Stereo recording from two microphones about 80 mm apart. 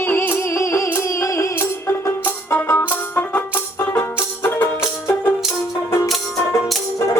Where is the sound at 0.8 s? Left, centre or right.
Left.